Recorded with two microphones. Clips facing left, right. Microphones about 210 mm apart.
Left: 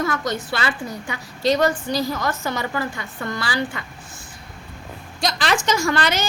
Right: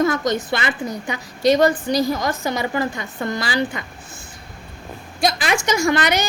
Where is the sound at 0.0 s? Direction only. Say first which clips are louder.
Right 5 dB; 20° right (ahead or behind).